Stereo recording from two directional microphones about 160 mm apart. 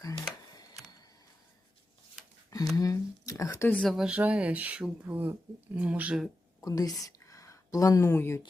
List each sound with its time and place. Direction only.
0.0 s camera: 20° left (ahead or behind)
2.7 s speech: 20° left (ahead or behind)
3.8 s speech: centre (ahead or behind)
6.6 s speech: 20° left (ahead or behind)